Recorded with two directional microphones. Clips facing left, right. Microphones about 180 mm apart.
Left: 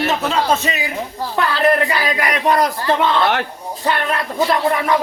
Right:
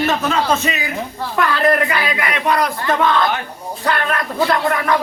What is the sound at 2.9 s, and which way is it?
Speech, 30° left (ahead or behind).